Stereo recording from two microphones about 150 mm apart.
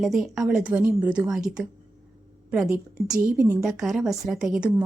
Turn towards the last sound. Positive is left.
turn(degrees=-5)  # may be behind; listen again after turning